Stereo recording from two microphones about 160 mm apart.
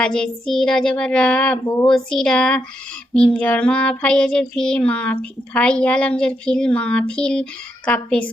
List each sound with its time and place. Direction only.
0.0 s child singing: 5° left (ahead or behind)
1.6 s speech: 20° left (ahead or behind)
1.9 s child singing: 5° left (ahead or behind)